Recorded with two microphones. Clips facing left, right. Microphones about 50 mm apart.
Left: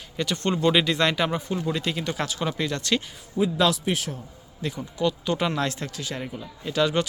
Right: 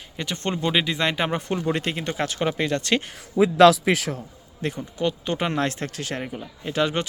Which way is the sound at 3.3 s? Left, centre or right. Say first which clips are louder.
Right 8 dB; right.